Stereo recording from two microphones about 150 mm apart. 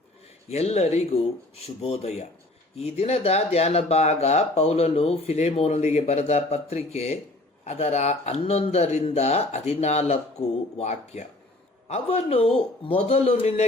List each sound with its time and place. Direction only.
0.4 s speech: 45° left (ahead or behind)
10.4 s speech: 15° left (ahead or behind)
10.8 s speech: 45° left (ahead or behind)